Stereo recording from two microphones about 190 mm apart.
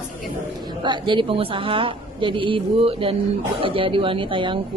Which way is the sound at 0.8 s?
25° right (ahead or behind).